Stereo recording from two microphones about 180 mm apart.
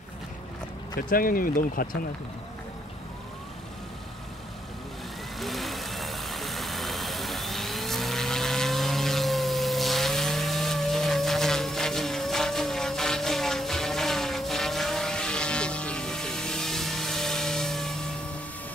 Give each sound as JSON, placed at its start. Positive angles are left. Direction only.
{"t": 1.1, "sound": "speech", "side_deg": 50}
{"t": 5.4, "sound": "vehicle", "side_deg": 0}